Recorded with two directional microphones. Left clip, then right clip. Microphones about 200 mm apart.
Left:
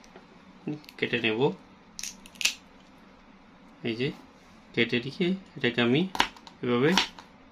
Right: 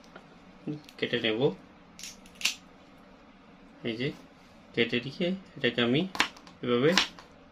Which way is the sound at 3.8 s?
35° left (ahead or behind).